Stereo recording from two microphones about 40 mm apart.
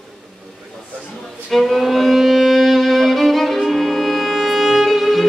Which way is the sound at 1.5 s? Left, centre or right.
Centre.